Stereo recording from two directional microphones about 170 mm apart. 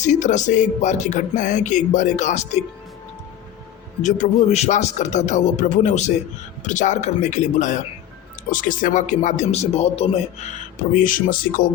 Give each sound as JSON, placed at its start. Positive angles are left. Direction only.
{"t": 0.0, "sound": "speech", "side_deg": 45}
{"t": 4.0, "sound": "speech", "side_deg": 40}